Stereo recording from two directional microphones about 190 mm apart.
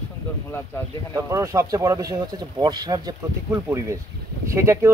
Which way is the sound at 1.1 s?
15° right (ahead or behind).